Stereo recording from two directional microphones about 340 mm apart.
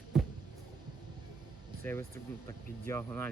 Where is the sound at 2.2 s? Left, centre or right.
Centre.